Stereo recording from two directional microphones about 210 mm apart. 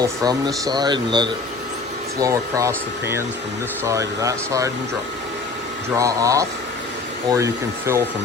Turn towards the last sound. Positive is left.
turn(degrees=-15)  # may be behind; listen again after turning